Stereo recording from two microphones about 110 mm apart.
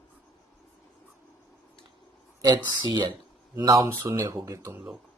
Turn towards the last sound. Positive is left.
turn(degrees=-30)  # may be behind; listen again after turning